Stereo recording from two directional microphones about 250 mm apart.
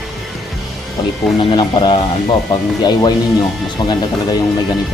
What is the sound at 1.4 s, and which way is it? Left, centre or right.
Speech, centre.